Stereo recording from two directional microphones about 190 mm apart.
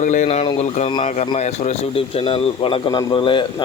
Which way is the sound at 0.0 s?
40° left (ahead or behind).